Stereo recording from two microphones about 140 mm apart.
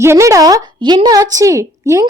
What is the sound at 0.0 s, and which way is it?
A woman's voice, 20° right (ahead or behind).